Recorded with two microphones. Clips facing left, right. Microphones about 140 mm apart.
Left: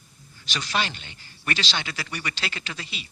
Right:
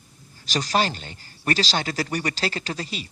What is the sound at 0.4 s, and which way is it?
Speech, 40° right (ahead or behind).